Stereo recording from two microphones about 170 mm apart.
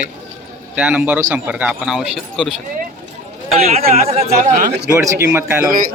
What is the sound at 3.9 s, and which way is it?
Speech, 40° right (ahead or behind).